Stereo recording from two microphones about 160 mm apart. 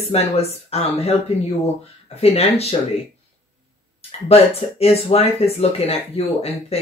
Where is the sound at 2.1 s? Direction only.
40° left (ahead or behind).